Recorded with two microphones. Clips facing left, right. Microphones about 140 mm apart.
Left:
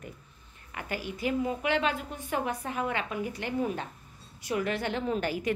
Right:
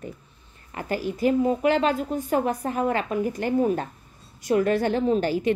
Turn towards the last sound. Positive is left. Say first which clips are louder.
# right 8 dB
turn(degrees=-30)  # may be behind; listen again after turning